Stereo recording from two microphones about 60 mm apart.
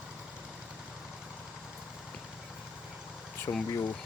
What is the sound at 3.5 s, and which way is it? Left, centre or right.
Speech, left.